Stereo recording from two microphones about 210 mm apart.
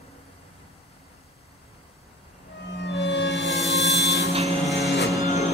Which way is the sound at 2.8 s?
55° left (ahead or behind).